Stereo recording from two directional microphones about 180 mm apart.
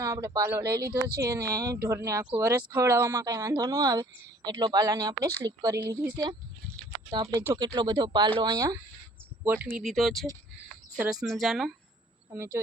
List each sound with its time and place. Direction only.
0.0 s speech: 15° right (ahead or behind); by 11.7 s centre (ahead or behind)
12.3 s speech: 15° right (ahead or behind)